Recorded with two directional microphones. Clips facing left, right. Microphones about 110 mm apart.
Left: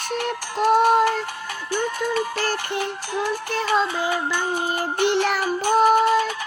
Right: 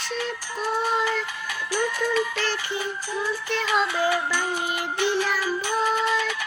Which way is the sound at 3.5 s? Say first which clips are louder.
Left 1 dB; 40° left (ahead or behind).